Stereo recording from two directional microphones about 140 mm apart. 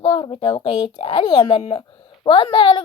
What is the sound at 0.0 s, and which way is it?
A child's voice, 35° left (ahead or behind).